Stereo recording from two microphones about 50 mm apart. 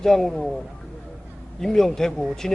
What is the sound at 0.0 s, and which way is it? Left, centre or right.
Speech, centre.